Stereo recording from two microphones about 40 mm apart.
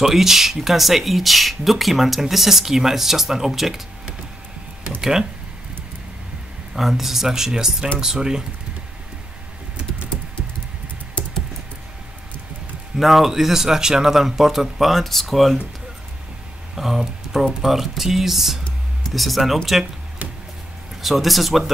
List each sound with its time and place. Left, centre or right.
0.0 s speech: centre
6.7 s speech: centre
12.9 s speech: centre
16.7 s speech: centre
21.0 s speech: centre